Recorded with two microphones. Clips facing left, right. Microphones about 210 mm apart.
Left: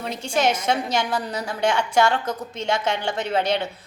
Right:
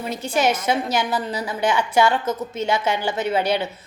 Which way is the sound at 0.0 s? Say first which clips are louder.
Right 1 dB; 5° right (ahead or behind).